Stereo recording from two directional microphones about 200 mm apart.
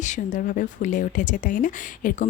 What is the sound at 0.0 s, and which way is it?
Speech, 40° left (ahead or behind).